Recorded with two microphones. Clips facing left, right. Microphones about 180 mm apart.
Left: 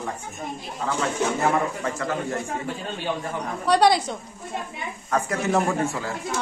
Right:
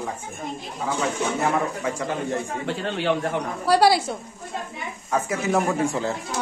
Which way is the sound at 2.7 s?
80° right.